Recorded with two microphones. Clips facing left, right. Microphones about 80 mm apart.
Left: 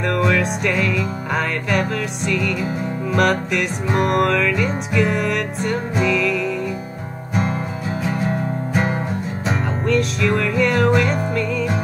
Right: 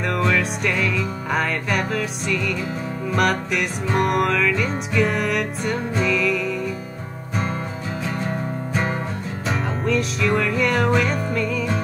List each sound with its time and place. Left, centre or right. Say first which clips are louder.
0.0 s music: left 3 dB; centre
9.5 s music: left 2 dB; centre